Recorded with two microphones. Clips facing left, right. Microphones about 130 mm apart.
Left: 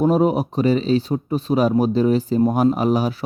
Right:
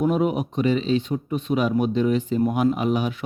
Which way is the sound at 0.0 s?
35° left (ahead or behind).